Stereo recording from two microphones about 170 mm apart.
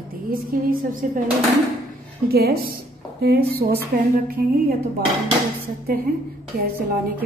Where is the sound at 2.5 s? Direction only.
65° right (ahead or behind).